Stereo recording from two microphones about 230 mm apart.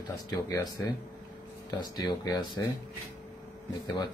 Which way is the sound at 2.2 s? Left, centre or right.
Centre.